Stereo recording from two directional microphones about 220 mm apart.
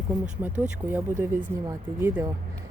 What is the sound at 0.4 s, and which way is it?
Speech, 10° right (ahead or behind).